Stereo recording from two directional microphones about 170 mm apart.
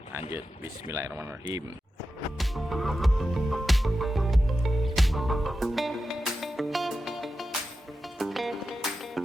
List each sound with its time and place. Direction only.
0.1 s speech: 15° right (ahead or behind)
2.4 s music: centre (ahead or behind)